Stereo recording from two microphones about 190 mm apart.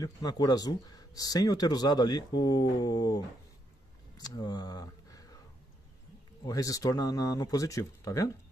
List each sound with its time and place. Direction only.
0.0 s speech: 20° left (ahead or behind)
4.2 s a sound: 20° left (ahead or behind)
6.4 s speech: 20° left (ahead or behind)